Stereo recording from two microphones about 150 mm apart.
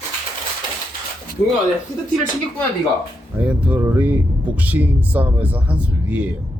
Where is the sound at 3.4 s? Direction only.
10° right (ahead or behind).